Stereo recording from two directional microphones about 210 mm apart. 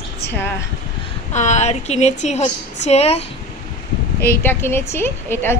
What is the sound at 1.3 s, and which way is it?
A woman's voice, 35° left (ahead or behind).